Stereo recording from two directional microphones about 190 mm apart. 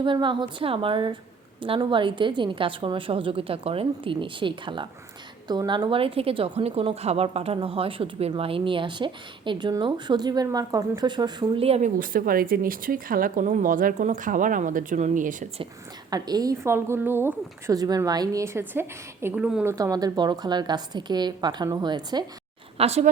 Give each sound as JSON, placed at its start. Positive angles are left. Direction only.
{"t": 0.0, "sound": "a woman's voice", "side_deg": -25}
{"t": 11.9, "sound": "speech", "side_deg": -45}
{"t": 16.0, "sound": "a woman's voice", "side_deg": -20}
{"t": 19.7, "sound": "a woman's voice", "side_deg": -20}
{"t": 22.8, "sound": "speech", "side_deg": -35}